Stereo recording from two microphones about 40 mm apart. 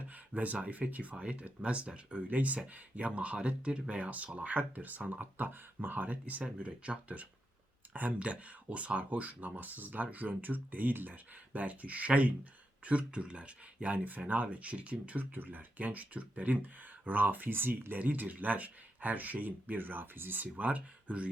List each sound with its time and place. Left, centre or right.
0.3 s speech: right
1.2 s speech: right
2.2 s speech: right
5.2 s speech: right
6.1 s speech: right
6.4 s speech: right
13.9 s speech: right
15.2 s speech: right
18.0 s speech: right